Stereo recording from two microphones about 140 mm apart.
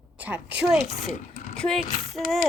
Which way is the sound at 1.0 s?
65° left (ahead or behind).